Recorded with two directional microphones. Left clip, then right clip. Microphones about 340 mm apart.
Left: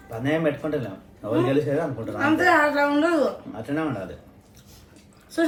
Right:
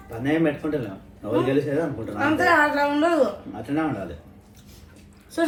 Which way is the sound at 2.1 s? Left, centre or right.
Centre.